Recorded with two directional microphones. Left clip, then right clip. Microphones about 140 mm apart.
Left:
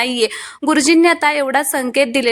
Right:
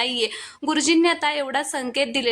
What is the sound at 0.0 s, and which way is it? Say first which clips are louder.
A woman's voice: left 6 dB; 35° left (ahead or behind).